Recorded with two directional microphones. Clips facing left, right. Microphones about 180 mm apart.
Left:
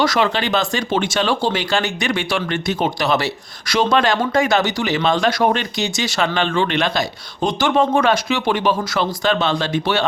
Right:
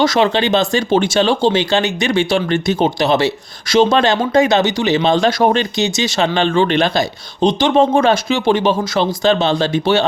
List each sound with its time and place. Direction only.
0.0 s speech: 25° right (ahead or behind)